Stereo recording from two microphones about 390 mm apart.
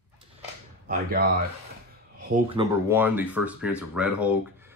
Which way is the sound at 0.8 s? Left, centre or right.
Right.